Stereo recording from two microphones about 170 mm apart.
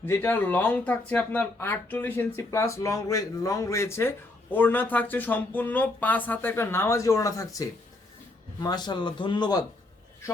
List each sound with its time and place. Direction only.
0.0 s speech: 15° left (ahead or behind)